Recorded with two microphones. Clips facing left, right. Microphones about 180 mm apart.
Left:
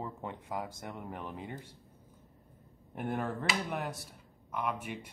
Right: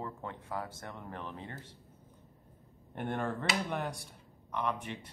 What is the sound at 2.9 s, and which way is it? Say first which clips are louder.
Speech: even; 5° left (ahead or behind).